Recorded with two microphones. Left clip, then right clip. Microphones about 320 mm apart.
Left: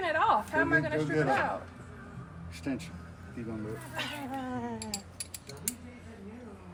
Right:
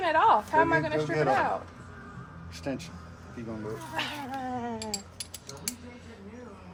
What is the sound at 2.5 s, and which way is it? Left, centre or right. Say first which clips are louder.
Speech: right 2 dB; centre.